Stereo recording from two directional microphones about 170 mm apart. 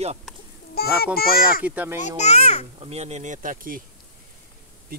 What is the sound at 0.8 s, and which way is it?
Speech, 65° left (ahead or behind).